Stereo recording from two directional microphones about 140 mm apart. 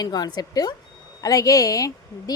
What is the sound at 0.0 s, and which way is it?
A woman's voice, 30° left (ahead or behind).